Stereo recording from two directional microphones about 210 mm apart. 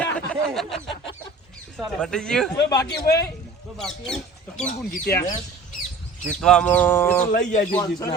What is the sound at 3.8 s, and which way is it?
Speech, 5° left (ahead or behind).